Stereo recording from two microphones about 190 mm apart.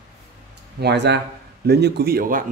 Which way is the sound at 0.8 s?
65° right (ahead or behind).